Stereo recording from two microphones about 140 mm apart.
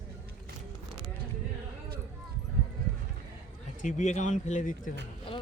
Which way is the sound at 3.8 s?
60° left (ahead or behind).